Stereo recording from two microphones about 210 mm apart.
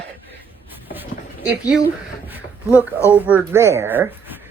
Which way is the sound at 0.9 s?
10° right (ahead or behind).